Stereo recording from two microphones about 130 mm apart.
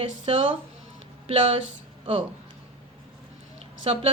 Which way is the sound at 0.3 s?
50° right (ahead or behind).